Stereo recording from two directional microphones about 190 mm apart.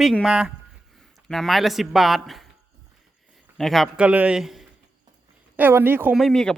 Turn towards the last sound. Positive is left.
turn(degrees=0)  # may be behind; listen again after turning